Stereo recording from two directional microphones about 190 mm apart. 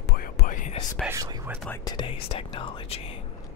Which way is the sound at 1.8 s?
25° left (ahead or behind).